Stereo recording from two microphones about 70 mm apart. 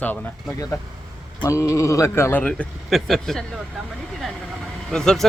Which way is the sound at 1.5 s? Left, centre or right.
Left.